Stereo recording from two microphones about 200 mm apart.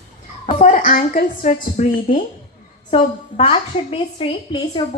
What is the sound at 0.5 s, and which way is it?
A woman's voice, 40° left (ahead or behind).